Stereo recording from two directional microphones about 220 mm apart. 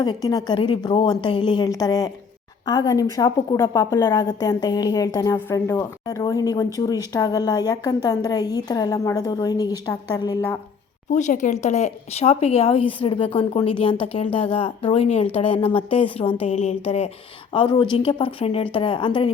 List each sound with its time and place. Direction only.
0.0 s a woman's voice: 20° left (ahead or behind)
11.1 s speech: 35° left (ahead or behind)